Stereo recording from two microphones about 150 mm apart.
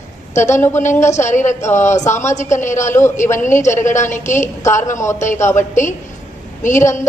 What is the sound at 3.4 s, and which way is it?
Speech, 55° left (ahead or behind).